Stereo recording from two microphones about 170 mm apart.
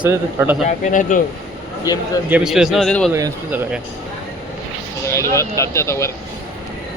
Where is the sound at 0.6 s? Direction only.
45° left (ahead or behind).